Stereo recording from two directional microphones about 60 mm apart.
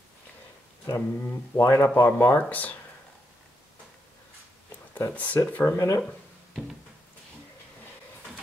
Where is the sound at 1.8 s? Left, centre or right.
Left.